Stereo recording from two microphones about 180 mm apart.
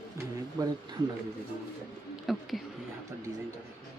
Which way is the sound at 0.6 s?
20° right (ahead or behind).